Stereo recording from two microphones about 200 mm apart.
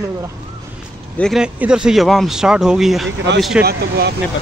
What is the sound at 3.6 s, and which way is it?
Speech, 50° right (ahead or behind).